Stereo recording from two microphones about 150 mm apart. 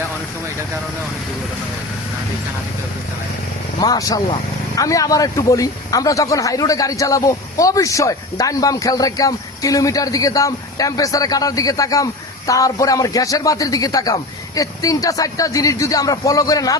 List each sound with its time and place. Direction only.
3.8 s speech: 25° left (ahead or behind)